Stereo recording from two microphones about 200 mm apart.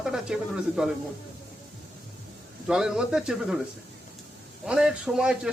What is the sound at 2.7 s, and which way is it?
Speech, 5° right (ahead or behind).